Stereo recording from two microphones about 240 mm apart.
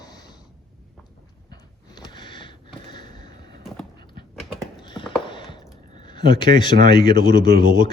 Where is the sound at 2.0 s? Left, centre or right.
Centre.